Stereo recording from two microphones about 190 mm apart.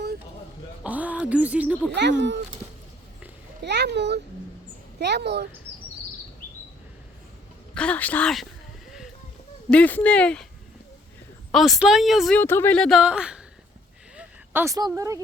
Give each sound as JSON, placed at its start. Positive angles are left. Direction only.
{"t": 0.9, "sound": "a sound", "side_deg": -10}
{"t": 1.9, "sound": "speech", "side_deg": -65}
{"t": 3.6, "sound": "a child's voice", "side_deg": -65}
{"t": 7.7, "sound": "a woman's voice", "side_deg": 5}
{"t": 9.6, "sound": "speech", "side_deg": 5}
{"t": 11.5, "sound": "a woman's voice", "side_deg": 0}
{"t": 12.4, "sound": "a woman's voice", "side_deg": 10}